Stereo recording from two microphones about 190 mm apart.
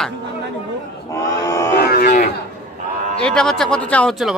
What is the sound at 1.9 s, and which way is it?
Cattle, 50° left (ahead or behind).